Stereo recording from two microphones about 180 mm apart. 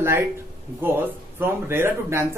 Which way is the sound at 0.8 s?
10° right (ahead or behind).